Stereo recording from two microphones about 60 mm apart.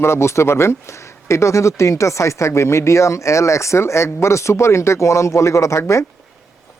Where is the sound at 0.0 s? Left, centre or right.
Left.